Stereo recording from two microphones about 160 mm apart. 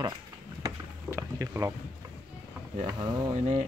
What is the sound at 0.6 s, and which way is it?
Vehicle, 20° right (ahead or behind).